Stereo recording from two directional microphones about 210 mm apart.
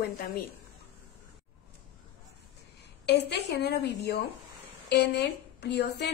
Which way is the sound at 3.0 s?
55° left (ahead or behind).